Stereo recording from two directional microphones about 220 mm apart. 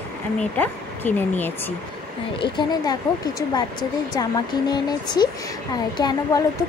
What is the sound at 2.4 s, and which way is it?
Speech, 20° left (ahead or behind).